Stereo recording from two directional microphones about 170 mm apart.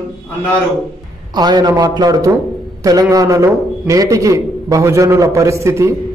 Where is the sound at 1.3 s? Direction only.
25° right (ahead or behind).